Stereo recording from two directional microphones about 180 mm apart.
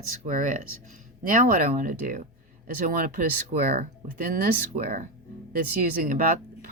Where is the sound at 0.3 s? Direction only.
45° right (ahead or behind).